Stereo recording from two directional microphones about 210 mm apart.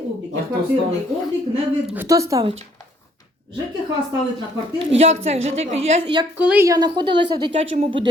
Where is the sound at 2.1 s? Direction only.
15° right (ahead or behind).